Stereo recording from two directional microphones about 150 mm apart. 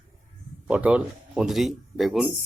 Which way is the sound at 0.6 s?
10° right (ahead or behind).